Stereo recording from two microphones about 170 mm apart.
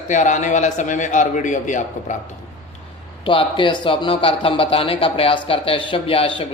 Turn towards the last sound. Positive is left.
turn(degrees=30)  # may be behind; listen again after turning